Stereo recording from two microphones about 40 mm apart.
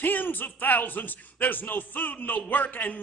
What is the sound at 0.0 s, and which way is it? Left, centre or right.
Speech, left.